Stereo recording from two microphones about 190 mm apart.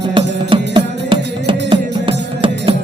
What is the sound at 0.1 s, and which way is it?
Music, 25° right (ahead or behind).